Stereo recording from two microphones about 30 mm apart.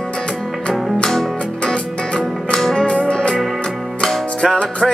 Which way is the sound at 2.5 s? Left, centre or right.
Centre.